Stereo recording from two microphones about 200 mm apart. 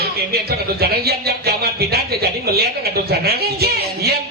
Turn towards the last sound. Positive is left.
turn(degrees=-50)  # may be behind; listen again after turning